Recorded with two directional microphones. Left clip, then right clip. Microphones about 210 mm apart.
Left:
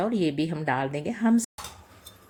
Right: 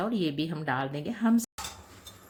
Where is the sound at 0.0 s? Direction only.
10° left (ahead or behind).